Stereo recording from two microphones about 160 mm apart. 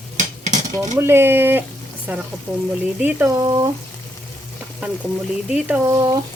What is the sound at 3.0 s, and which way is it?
Stir, 10° right (ahead or behind).